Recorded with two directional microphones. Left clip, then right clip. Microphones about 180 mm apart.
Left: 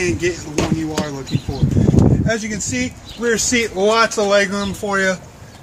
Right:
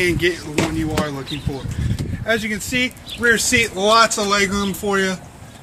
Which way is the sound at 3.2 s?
50° left (ahead or behind).